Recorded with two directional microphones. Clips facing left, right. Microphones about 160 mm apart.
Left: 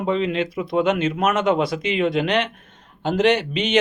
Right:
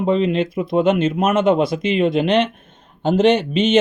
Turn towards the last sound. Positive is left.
turn(degrees=15)  # may be behind; listen again after turning